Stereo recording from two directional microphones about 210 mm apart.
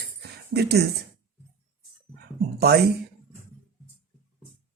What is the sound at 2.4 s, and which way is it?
Speech, 50° right (ahead or behind).